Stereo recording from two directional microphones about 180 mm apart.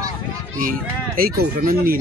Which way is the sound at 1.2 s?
55° right (ahead or behind).